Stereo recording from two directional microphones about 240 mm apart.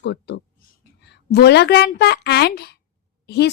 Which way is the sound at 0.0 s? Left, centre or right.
Left.